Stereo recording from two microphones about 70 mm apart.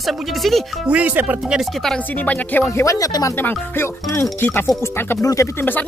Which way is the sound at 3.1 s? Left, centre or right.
Left.